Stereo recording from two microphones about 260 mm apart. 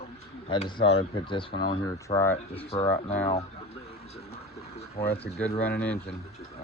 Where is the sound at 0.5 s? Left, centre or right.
Left.